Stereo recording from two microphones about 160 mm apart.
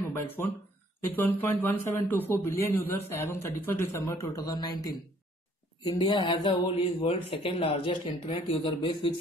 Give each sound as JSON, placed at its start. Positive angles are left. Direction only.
{"t": 0.4, "sound": "a man's voice", "side_deg": 15}